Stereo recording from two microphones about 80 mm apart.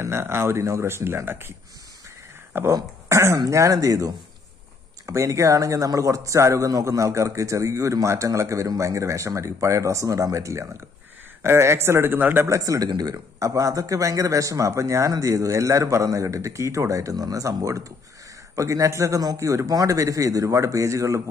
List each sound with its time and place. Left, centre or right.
0.0 s a man's voice: right
2.7 s a man's voice: right
12.4 s speech: right